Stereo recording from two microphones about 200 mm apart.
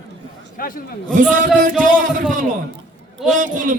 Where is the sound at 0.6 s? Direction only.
45° left (ahead or behind).